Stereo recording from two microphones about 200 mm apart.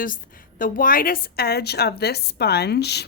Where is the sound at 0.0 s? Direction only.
45° left (ahead or behind).